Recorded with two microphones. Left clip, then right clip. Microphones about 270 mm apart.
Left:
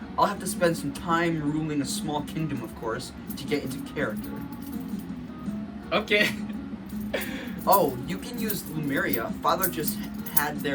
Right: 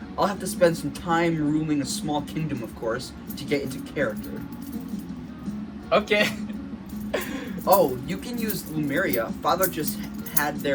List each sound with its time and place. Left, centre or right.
0.2 s a man's voice: centre
3.5 s a man's voice: centre
5.9 s a man's voice: centre
7.1 s music: centre
7.6 s a man's voice: centre